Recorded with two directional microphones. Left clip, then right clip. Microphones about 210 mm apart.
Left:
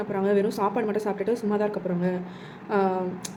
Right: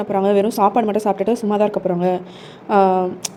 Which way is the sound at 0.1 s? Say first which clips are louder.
Right 8 dB; 30° right (ahead or behind).